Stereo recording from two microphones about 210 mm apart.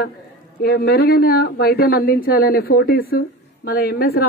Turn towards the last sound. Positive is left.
turn(degrees=45)  # may be behind; listen again after turning